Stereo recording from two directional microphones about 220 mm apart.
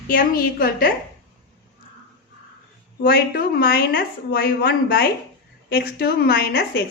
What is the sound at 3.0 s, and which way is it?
A woman's voice, 45° left (ahead or behind).